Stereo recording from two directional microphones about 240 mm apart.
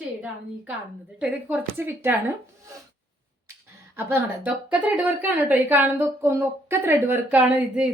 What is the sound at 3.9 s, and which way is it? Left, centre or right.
Speech, centre.